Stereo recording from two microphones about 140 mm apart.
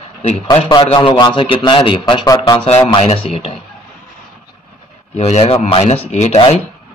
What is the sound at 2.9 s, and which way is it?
Speech, 40° left (ahead or behind).